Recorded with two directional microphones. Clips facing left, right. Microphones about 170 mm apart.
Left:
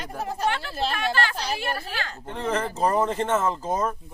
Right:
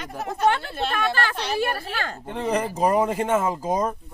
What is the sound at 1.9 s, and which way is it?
Speech, 50° right (ahead or behind).